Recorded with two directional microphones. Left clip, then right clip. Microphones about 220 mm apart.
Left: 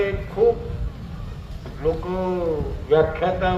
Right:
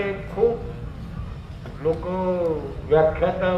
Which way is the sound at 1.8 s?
45° left (ahead or behind).